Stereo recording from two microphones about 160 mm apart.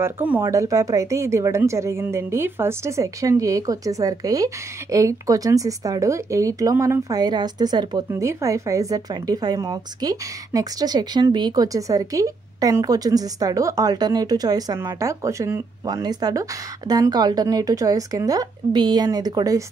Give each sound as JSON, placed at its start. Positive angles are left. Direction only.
{"t": 0.0, "sound": "speech", "side_deg": -15}